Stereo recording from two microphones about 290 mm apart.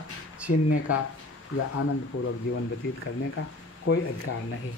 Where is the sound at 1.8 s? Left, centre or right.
Left.